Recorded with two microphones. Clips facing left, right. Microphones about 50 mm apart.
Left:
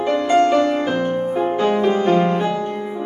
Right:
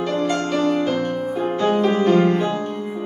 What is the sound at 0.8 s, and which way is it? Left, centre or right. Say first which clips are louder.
Music: left 2 dB; centre.